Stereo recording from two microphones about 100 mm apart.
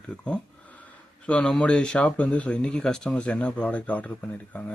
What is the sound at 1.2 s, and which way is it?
A man's voice, 10° left (ahead or behind).